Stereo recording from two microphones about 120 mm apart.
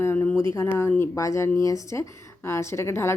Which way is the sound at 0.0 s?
15° left (ahead or behind).